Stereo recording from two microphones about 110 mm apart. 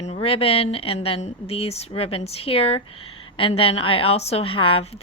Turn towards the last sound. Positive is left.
turn(degrees=55)  # may be behind; listen again after turning